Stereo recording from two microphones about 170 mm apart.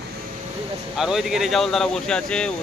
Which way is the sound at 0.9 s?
Centre (ahead or behind).